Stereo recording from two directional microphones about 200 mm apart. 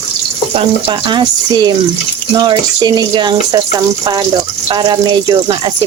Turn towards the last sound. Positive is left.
turn(degrees=-20)  # may be behind; listen again after turning